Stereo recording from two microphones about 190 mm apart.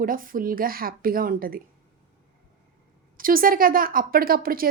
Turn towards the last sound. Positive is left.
turn(degrees=-50)  # may be behind; listen again after turning